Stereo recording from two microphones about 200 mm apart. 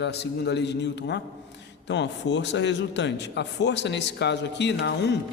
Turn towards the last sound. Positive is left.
turn(degrees=60)  # may be behind; listen again after turning